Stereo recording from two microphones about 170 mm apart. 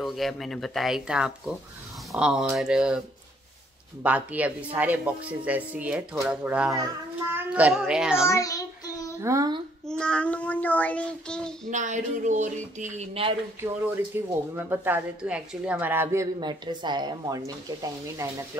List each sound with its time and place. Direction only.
0.0 s speech: centre (ahead or behind)
4.0 s speech: 10° right (ahead or behind)
6.7 s child singing: 15° right (ahead or behind)
7.5 s speech: 10° right (ahead or behind)
8.3 s child singing: 20° left (ahead or behind)
9.2 s speech: 20° right (ahead or behind)
9.8 s child singing: 5° left (ahead or behind)
11.7 s speech: 45° right (ahead or behind)
14.5 s speech: 10° right (ahead or behind)